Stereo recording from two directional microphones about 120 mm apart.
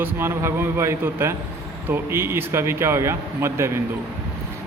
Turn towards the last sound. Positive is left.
turn(degrees=-20)  # may be behind; listen again after turning